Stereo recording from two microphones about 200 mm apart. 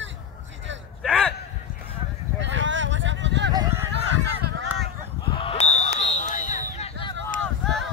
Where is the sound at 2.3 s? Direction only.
65° right (ahead or behind).